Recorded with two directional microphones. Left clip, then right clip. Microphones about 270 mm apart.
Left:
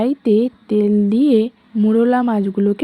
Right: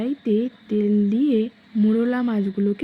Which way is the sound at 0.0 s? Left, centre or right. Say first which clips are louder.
Left 7 dB; left.